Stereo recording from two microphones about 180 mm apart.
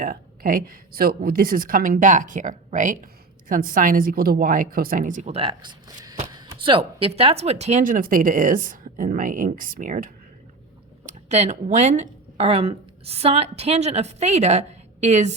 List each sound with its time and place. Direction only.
0.0 s speech: 55° right (ahead or behind)
11.0 s speech: 40° right (ahead or behind)